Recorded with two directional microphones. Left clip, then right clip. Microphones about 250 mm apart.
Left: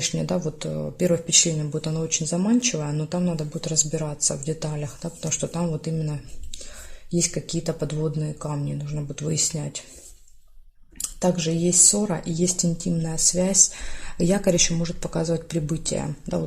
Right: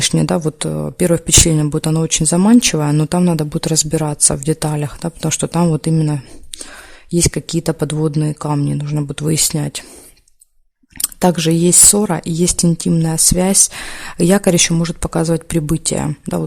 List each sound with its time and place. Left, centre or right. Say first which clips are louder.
0.0 s speech: right 10 dB; right
10.9 s speech: right 8 dB; right